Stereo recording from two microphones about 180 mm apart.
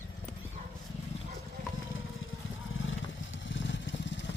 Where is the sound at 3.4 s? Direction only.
90° left.